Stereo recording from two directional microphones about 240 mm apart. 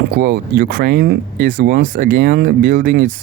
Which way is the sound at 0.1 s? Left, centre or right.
Right.